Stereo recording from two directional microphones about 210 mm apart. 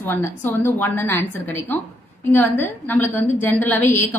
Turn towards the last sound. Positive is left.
turn(degrees=10)  # may be behind; listen again after turning